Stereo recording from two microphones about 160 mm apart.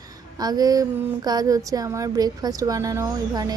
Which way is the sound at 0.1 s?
25° right (ahead or behind).